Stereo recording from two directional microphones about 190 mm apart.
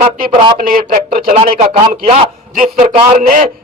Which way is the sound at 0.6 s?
50° right (ahead or behind).